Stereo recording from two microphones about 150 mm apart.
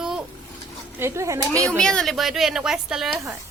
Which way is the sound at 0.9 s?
20° right (ahead or behind).